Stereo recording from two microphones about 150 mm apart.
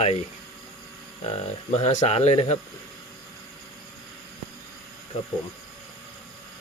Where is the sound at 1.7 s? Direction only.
50° left (ahead or behind).